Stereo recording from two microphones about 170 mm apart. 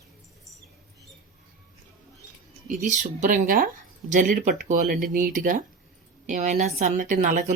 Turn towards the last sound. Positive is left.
turn(degrees=-50)  # may be behind; listen again after turning